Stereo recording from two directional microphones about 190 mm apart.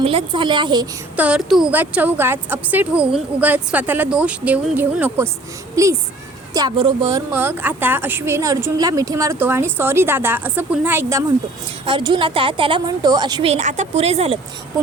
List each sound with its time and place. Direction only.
0.0 s a woman's voice: 30° right (ahead or behind)
1.1 s speech: 5° right (ahead or behind)
11.9 s a woman's voice: 25° right (ahead or behind)